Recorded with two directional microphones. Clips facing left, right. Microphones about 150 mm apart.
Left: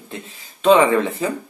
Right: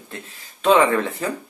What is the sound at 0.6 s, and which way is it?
Speech, 10° left (ahead or behind).